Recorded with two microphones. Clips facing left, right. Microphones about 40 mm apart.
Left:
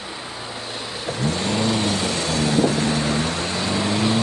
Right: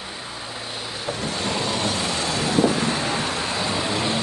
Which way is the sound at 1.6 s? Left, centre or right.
Centre.